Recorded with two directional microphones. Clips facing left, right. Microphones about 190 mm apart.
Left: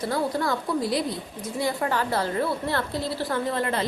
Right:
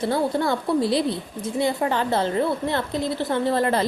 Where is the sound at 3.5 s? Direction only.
35° right (ahead or behind).